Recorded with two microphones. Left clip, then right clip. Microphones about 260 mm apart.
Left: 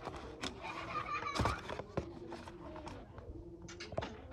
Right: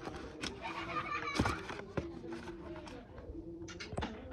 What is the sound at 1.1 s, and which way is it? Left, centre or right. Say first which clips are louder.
Music: even; left.